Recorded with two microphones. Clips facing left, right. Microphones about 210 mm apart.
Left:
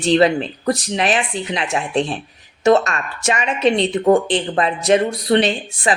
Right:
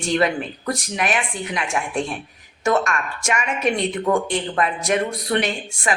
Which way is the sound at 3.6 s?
30° left (ahead or behind).